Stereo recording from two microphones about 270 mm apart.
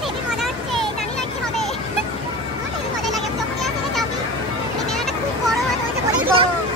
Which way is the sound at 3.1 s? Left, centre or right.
Centre.